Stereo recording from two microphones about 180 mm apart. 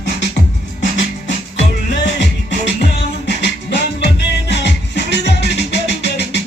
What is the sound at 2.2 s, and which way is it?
Music, 75° left (ahead or behind).